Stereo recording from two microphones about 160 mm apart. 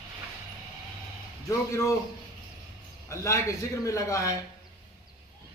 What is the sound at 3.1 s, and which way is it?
A man's voice, 20° left (ahead or behind).